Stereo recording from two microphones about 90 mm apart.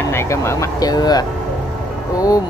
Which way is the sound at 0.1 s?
30° left (ahead or behind).